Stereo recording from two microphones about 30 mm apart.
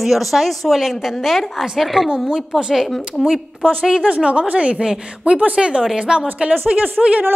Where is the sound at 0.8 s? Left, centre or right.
Centre.